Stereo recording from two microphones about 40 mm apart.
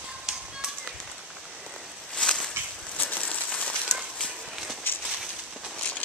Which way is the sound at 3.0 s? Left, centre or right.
Left.